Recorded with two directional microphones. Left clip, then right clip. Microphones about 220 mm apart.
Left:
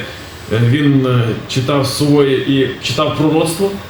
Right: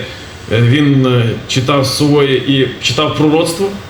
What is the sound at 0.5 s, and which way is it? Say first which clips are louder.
Speech: right 2 dB; 45° right (ahead or behind).